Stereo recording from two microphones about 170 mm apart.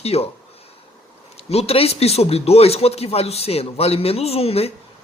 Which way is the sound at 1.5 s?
35° left (ahead or behind).